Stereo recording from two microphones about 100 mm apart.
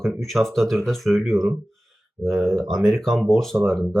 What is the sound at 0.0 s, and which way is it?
Speech, centre (ahead or behind).